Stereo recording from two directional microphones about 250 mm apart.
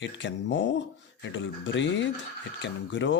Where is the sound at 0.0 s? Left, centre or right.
Left.